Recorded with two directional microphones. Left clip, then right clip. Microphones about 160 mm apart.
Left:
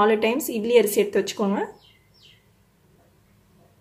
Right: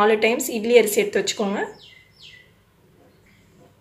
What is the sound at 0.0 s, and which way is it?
A woman's voice, 45° left (ahead or behind).